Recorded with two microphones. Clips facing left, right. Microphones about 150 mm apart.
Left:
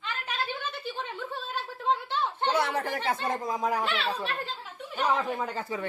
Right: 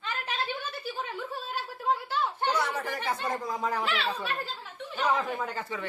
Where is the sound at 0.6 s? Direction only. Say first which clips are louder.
Even; 10° right (ahead or behind).